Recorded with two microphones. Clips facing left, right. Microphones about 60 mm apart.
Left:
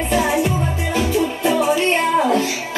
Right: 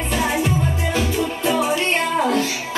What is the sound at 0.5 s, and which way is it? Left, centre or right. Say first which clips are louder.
Music: even; centre.